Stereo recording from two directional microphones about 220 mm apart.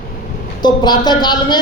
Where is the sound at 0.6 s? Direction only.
20° left (ahead or behind).